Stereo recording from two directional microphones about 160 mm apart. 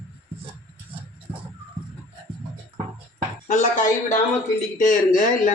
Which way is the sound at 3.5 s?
50° left (ahead or behind).